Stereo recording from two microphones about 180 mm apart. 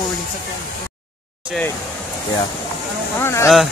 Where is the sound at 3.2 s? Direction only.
15° left (ahead or behind).